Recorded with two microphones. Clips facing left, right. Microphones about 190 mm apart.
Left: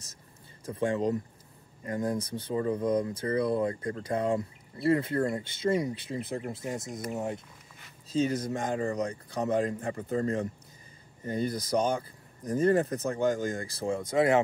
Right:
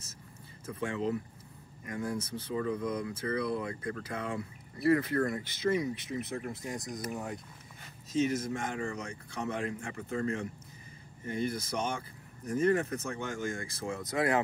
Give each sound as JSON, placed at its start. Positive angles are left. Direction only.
{"t": 0.7, "sound": "speech", "side_deg": 35}